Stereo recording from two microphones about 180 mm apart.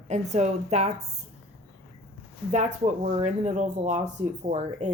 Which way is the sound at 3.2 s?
40° right (ahead or behind).